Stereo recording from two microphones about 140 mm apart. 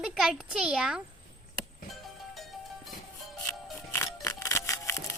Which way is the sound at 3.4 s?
20° left (ahead or behind).